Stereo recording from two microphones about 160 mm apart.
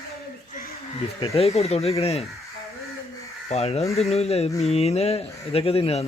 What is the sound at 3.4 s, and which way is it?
Speech, 40° left (ahead or behind).